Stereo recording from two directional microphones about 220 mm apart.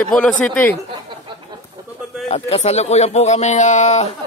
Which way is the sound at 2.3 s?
30° left (ahead or behind).